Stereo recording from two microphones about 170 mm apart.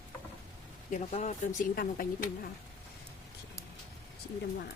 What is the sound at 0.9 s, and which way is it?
Speech, 45° left (ahead or behind).